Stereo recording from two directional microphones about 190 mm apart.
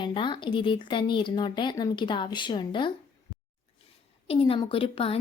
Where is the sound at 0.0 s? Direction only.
25° left (ahead or behind).